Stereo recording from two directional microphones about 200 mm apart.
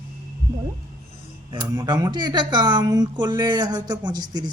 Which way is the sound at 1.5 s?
20° right (ahead or behind).